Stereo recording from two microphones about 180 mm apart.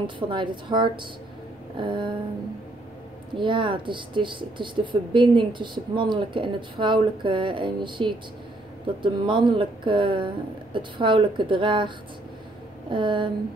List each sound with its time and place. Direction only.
0.0 s speech: 25° right (ahead or behind)
3.3 s speech: 25° right (ahead or behind)
12.9 s speech: 25° right (ahead or behind)